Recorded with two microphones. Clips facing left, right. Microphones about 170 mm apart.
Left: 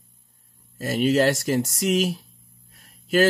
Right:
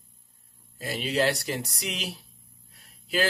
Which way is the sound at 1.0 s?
45° left (ahead or behind).